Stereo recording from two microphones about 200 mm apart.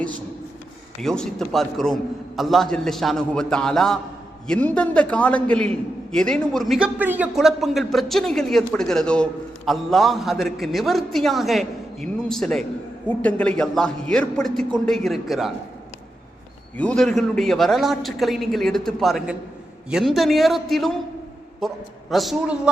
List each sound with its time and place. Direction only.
1.0 s a man's voice: 5° left (ahead or behind)
16.7 s a man's voice: 5° left (ahead or behind)